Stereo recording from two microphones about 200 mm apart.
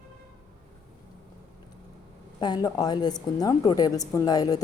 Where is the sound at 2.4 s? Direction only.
20° left (ahead or behind).